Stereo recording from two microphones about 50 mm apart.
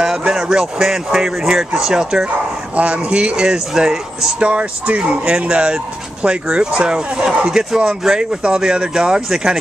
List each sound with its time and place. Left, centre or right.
0.3 s speech: centre
2.7 s speech: right; by 4.4 s centre
4.4 s speech: right